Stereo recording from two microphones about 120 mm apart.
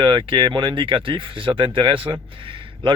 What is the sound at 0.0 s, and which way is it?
Speech, 45° right (ahead or behind).